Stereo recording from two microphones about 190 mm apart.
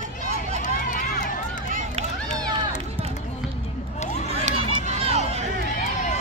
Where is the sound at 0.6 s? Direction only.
45° left (ahead or behind).